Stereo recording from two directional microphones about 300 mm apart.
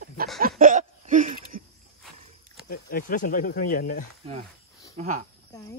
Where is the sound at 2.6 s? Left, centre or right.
Left.